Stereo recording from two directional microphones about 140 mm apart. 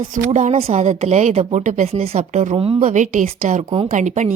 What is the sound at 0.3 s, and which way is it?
A woman's voice, 55° right (ahead or behind).